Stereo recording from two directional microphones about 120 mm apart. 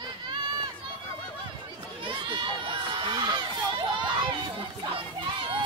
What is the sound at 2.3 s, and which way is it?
Crowd, 40° right (ahead or behind).